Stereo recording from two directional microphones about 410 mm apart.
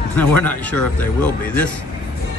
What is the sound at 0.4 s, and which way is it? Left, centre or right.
Speech, centre.